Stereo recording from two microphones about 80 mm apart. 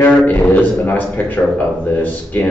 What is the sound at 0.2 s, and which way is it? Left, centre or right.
A man's voice, centre.